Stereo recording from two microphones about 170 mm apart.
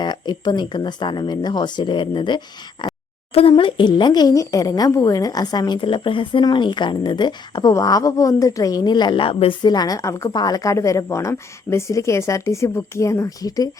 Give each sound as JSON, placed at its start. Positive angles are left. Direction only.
{"t": 0.0, "sound": "speech", "side_deg": 25}